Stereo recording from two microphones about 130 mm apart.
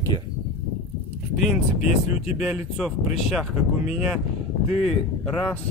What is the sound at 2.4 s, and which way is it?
Speech, 5° right (ahead or behind).